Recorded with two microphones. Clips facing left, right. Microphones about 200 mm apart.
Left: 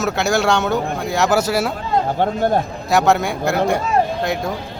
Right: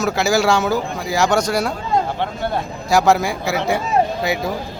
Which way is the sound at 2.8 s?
Centre (ahead or behind).